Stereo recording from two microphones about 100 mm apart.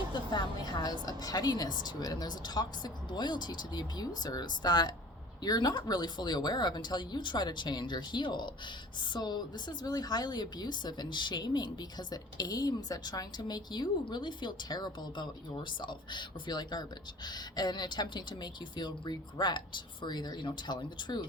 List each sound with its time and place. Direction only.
0.3 s a woman's voice: 45° left (ahead or behind)